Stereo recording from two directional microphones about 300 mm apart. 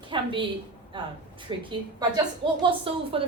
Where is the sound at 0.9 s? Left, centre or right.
Centre.